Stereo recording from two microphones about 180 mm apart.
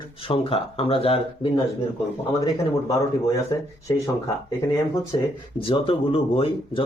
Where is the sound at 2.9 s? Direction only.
20° left (ahead or behind).